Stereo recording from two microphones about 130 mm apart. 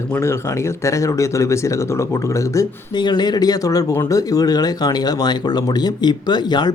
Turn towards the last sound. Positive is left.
turn(degrees=35)  # may be behind; listen again after turning